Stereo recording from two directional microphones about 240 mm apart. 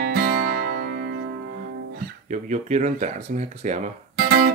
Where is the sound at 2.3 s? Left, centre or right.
Right.